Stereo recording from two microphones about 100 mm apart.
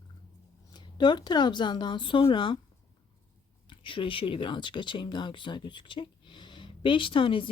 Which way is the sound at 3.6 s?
60° left (ahead or behind).